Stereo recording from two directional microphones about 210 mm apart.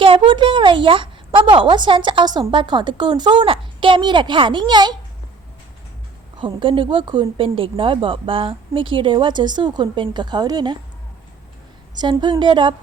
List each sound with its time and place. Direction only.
0.0 s a woman's voice: 25° right (ahead or behind)
6.3 s speech: 25° right (ahead or behind)
11.9 s speech: 20° right (ahead or behind)